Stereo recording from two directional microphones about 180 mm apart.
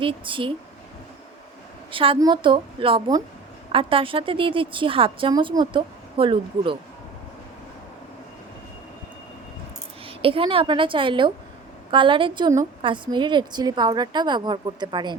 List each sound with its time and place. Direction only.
0.0 s a woman's voice: 30° right (ahead or behind)
1.9 s a woman's voice: 30° right (ahead or behind)
10.1 s a woman's voice: 30° right (ahead or behind)